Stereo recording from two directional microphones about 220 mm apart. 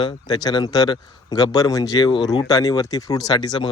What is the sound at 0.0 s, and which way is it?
A man's voice, 20° left (ahead or behind).